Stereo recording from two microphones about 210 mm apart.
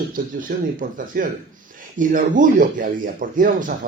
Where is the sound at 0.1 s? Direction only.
40° right (ahead or behind).